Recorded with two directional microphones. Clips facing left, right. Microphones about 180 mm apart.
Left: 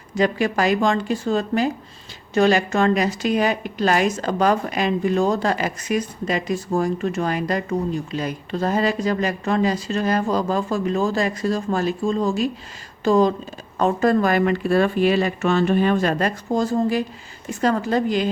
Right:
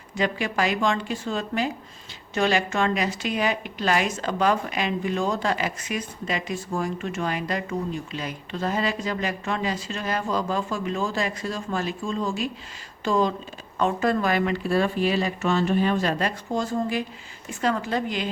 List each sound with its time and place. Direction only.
0.1 s a woman's voice: 40° left (ahead or behind)